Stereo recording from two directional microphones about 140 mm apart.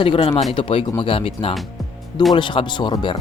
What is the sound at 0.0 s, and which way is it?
Speech, 40° left (ahead or behind).